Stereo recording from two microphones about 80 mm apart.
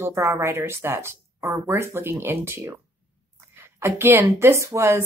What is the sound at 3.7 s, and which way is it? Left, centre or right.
A woman's voice, right.